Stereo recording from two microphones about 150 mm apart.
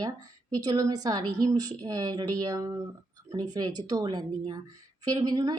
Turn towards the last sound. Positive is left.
turn(degrees=-25)  # may be behind; listen again after turning